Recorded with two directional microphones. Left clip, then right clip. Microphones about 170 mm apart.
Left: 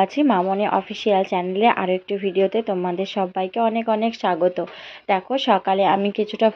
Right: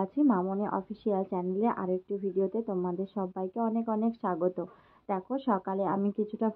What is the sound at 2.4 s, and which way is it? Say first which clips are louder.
Speech: left 11 dB; 30° left (ahead or behind).